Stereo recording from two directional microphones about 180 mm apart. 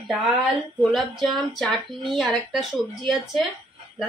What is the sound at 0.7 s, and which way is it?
Speech, centre (ahead or behind).